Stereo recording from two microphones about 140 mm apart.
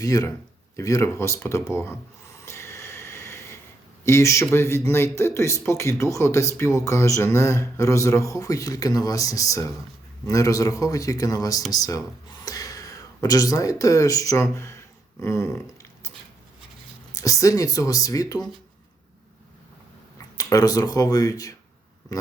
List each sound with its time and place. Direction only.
0.0 s speech: 25° left (ahead or behind)
2.4 s a sound: 20° left (ahead or behind)
4.0 s speech: 20° left (ahead or behind)
15.2 s a sound: 25° left (ahead or behind)
17.2 s speech: 25° left (ahead or behind)
20.1 s speech: 25° left (ahead or behind)